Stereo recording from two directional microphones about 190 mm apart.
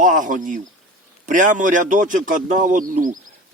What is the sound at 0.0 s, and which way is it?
A man's voice, 45° right (ahead or behind).